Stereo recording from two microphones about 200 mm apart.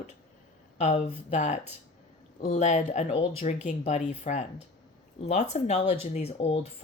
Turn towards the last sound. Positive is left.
turn(degrees=30)  # may be behind; listen again after turning